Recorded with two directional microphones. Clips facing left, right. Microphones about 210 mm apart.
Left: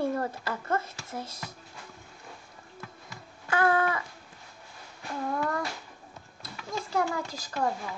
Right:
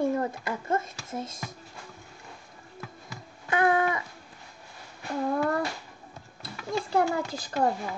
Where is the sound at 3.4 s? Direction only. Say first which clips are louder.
Right 1 dB; 20° right (ahead or behind).